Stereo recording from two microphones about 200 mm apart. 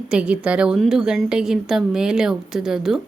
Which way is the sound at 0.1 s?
5° right (ahead or behind).